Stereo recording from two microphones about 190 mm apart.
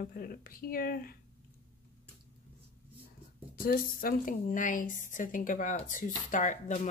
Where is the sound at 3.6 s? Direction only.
50° left (ahead or behind).